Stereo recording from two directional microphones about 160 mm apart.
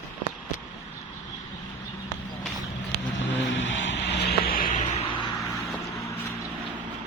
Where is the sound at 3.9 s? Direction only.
90° left; by 5.0 s 50° left (ahead or behind).